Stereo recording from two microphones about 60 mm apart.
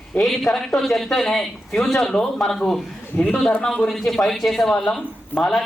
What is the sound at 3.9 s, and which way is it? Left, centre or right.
Speech, centre.